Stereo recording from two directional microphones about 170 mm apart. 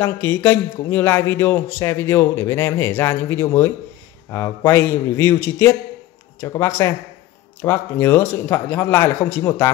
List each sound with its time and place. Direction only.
0.0 s a man's voice: 10° left (ahead or behind)